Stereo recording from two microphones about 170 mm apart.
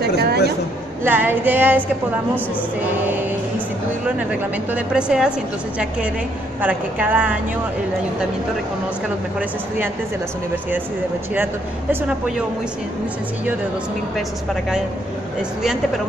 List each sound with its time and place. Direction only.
0.0 s a sound: 70° right (ahead or behind)
1.0 s a woman's voice: 10° right (ahead or behind)
4.0 s a woman's voice: 10° right (ahead or behind)
6.6 s a woman's voice: 10° right (ahead or behind)
14.1 s a woman's voice: centre (ahead or behind)